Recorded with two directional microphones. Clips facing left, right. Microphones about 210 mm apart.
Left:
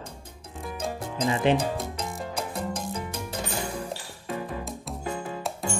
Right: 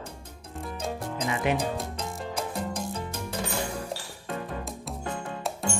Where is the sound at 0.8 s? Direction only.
Centre (ahead or behind).